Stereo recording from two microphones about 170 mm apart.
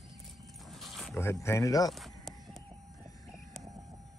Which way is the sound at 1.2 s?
15° left (ahead or behind).